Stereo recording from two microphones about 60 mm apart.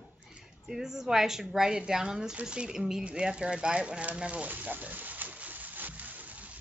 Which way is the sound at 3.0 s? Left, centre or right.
Centre.